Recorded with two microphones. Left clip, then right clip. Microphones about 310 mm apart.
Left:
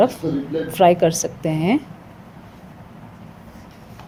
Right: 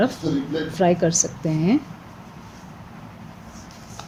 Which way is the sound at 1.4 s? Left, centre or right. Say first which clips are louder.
Left 2 dB; left.